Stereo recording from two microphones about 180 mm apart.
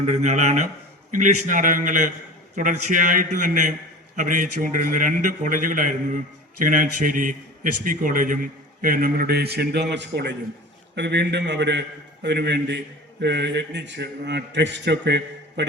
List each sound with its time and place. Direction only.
0.0 s a man's voice: 40° right (ahead or behind); by 15.6 s 75° right (ahead or behind)